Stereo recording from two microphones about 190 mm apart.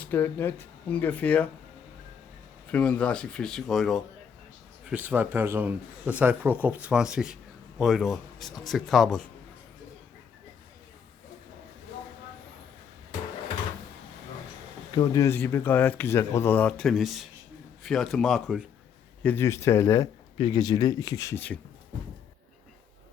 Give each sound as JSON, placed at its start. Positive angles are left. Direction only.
{"t": 0.0, "sound": "speech", "side_deg": 10}
{"t": 2.7, "sound": "a man's voice", "side_deg": 5}
{"t": 4.9, "sound": "a man's voice", "side_deg": -10}
{"t": 14.9, "sound": "a man's voice", "side_deg": 20}
{"t": 19.2, "sound": "speech", "side_deg": 10}